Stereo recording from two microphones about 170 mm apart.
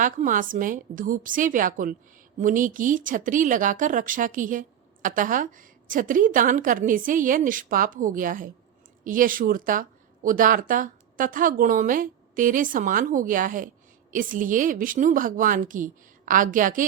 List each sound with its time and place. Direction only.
0.0 s a woman's voice: 50° right (ahead or behind)